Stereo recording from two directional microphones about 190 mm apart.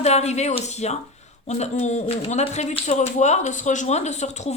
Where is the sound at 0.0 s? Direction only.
35° left (ahead or behind).